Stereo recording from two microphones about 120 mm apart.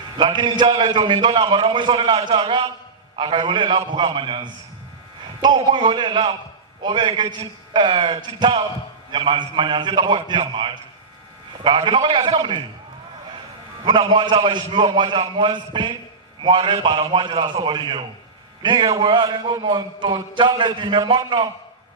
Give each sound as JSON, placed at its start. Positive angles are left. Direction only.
{"t": 0.2, "sound": "a man's voice", "side_deg": -40}
{"t": 5.5, "sound": "a man's voice", "side_deg": -45}
{"t": 13.8, "sound": "a man's voice", "side_deg": -40}